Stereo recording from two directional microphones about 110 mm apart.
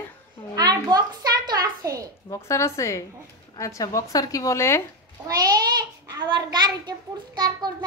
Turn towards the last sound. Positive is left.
turn(degrees=-40)  # may be behind; listen again after turning